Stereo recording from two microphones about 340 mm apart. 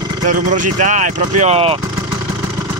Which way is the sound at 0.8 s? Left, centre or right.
Right.